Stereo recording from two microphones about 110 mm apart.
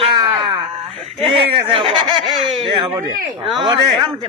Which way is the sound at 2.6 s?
50° right (ahead or behind).